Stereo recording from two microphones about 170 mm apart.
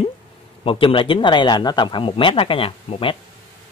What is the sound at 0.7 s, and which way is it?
Speech, 30° left (ahead or behind).